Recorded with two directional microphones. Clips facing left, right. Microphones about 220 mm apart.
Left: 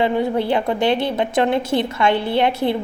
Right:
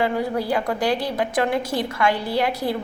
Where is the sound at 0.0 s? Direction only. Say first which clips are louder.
Left 4 dB; 25° left (ahead or behind).